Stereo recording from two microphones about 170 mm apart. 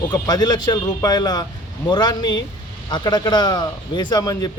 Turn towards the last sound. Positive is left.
turn(degrees=20)  # may be behind; listen again after turning